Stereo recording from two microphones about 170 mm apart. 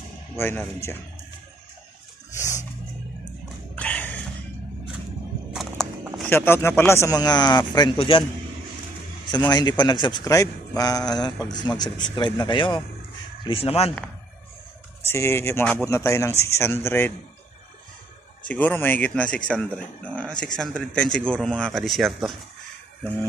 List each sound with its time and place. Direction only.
0.4 s speech: 15° left (ahead or behind)
3.7 s a sound: 10° left (ahead or behind)
5.5 s walk: centre (ahead or behind)
6.2 s a man's voice: 15° left (ahead or behind); by 8.2 s 30° left (ahead or behind)
9.5 s a man's voice: 25° left (ahead or behind)
15.0 s speech: 15° left (ahead or behind)
18.5 s speech: 10° left (ahead or behind)